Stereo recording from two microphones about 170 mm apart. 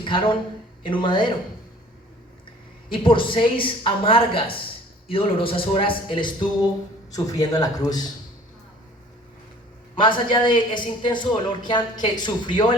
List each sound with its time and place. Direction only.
0.0 s speech: 30° left (ahead or behind)
2.9 s speech: 30° left (ahead or behind)
9.9 s speech: 30° left (ahead or behind)